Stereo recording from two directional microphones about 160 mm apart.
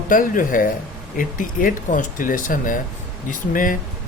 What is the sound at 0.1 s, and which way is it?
Speech, 60° left (ahead or behind).